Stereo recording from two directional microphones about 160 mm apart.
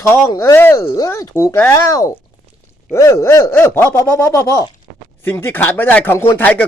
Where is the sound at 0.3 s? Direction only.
20° left (ahead or behind).